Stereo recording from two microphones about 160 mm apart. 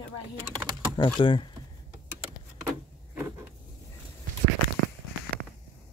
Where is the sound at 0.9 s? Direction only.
30° left (ahead or behind).